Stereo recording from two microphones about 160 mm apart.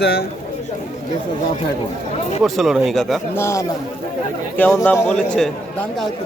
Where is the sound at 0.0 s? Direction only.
90° left.